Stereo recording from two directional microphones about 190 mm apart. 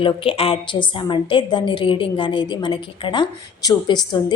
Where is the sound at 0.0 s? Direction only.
30° left (ahead or behind).